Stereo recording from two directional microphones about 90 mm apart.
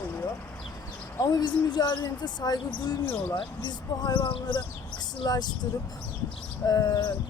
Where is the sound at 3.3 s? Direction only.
60° left (ahead or behind).